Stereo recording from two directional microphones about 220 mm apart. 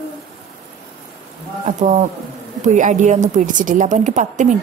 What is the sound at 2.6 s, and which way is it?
A woman's voice, 35° right (ahead or behind).